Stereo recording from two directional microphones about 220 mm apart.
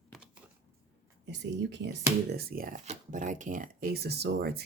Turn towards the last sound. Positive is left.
turn(degrees=-45)  # may be behind; listen again after turning